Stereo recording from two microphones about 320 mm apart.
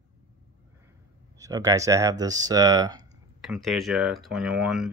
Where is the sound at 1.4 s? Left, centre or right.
Centre.